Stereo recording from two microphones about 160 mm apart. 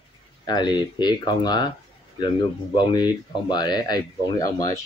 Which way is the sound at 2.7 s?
25° left (ahead or behind).